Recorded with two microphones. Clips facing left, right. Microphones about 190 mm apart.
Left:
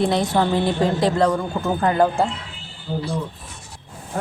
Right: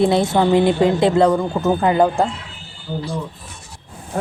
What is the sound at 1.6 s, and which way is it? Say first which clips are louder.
Speech: right 2 dB; 20° right (ahead or behind).